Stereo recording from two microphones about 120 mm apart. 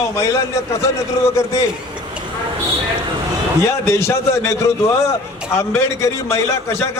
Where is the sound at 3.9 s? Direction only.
25° left (ahead or behind).